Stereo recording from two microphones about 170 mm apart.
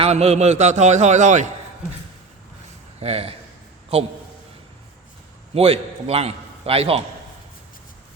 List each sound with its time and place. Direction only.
0.0 s a man's voice: 35° right (ahead or behind)
3.0 s a man's voice: 35° right (ahead or behind)
5.5 s a man's voice: 35° right (ahead or behind)